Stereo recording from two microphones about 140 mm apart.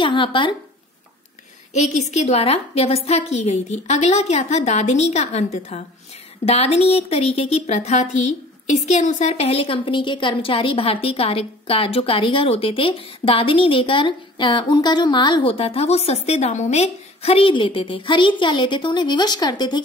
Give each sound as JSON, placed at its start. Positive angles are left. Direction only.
{"t": 0.0, "sound": "speech", "side_deg": 35}
{"t": 1.7, "sound": "a woman's voice", "side_deg": 55}